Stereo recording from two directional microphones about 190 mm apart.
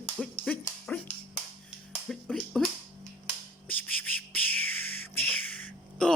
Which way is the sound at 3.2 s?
10° left (ahead or behind).